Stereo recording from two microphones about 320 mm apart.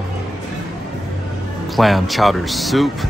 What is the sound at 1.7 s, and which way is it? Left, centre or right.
Speech, centre.